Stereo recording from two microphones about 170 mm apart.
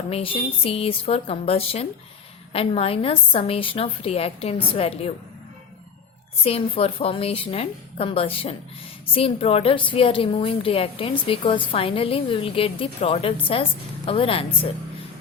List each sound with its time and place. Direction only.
0.1 s a woman's voice: 35° left (ahead or behind)
6.4 s a woman's voice: 35° left (ahead or behind)